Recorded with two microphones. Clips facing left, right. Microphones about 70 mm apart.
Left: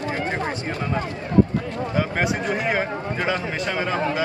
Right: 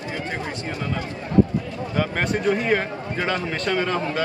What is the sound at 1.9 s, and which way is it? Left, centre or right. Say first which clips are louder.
A man's voice: even; centre.